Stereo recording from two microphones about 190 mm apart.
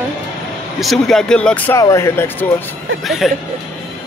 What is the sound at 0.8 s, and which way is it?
Speech, centre (ahead or behind).